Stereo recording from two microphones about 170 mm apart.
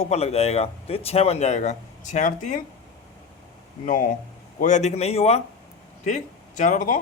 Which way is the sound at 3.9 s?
55° left (ahead or behind).